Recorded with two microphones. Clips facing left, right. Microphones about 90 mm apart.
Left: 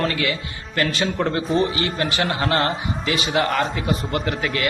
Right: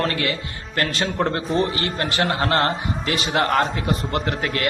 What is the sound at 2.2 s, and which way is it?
A man's voice, 50° right (ahead or behind).